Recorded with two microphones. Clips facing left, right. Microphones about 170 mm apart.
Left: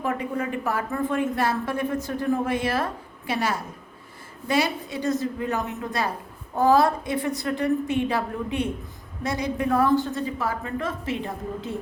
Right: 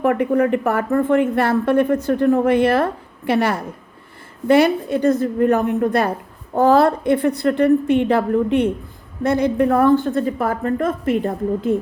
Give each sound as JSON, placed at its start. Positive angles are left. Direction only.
{"t": 0.0, "sound": "a woman's voice", "side_deg": -60}